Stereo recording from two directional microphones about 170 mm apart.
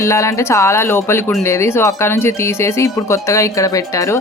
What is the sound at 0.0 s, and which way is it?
Speech, 15° left (ahead or behind).